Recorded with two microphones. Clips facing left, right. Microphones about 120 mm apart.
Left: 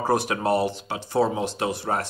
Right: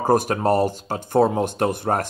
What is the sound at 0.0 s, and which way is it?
Speech, 45° right (ahead or behind).